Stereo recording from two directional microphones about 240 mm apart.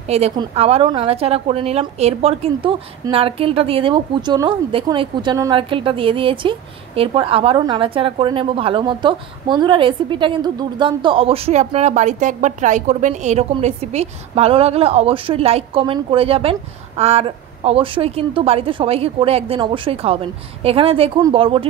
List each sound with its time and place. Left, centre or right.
0.1 s a woman's voice: right